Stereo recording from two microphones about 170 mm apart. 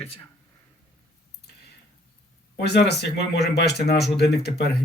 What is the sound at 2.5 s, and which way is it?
Speech, 75° left (ahead or behind).